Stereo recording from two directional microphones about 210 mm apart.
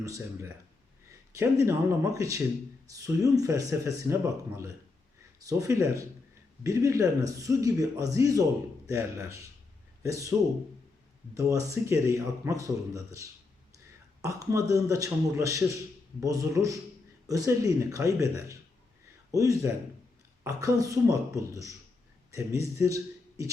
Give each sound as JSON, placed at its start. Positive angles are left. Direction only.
{"t": 0.0, "sound": "speech", "side_deg": -15}
{"t": 11.3, "sound": "speech", "side_deg": -15}